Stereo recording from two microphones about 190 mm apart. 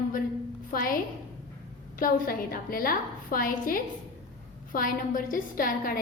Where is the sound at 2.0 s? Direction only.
50° left (ahead or behind).